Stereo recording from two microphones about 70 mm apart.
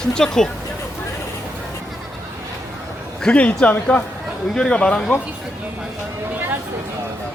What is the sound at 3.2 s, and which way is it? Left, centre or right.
Speech, centre.